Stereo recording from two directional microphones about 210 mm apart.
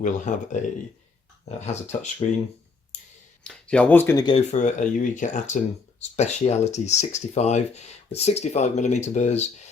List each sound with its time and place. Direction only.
0.0 s speech: 35° left (ahead or behind)
3.4 s speech: 5° left (ahead or behind)
4.4 s speech: 35° left (ahead or behind)